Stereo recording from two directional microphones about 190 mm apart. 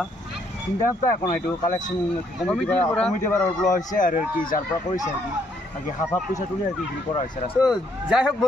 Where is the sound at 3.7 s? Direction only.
45° left (ahead or behind).